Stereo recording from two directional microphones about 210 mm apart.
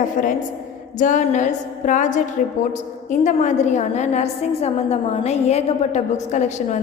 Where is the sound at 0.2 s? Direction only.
40° left (ahead or behind).